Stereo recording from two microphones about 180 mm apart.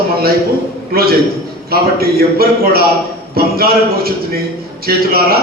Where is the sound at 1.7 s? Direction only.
55° right (ahead or behind).